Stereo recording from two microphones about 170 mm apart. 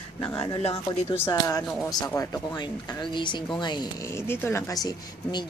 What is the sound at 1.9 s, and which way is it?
Speech, 25° left (ahead or behind).